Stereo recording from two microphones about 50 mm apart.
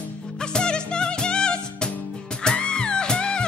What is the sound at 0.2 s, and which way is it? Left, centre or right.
Music, centre.